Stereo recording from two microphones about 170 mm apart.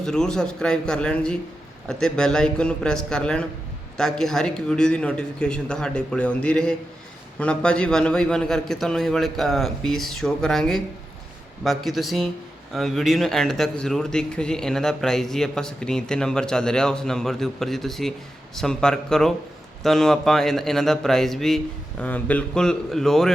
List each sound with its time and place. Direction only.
0.0 s speech: 5° left (ahead or behind)